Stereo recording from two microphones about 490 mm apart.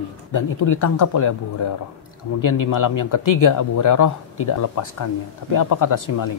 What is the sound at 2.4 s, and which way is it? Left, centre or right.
Speech, left.